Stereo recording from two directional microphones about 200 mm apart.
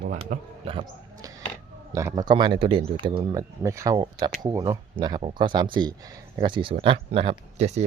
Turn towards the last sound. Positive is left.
turn(degrees=-35)  # may be behind; listen again after turning